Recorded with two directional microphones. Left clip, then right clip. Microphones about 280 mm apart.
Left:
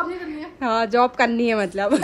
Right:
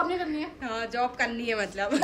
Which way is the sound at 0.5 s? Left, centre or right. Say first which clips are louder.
Left 14 dB; centre.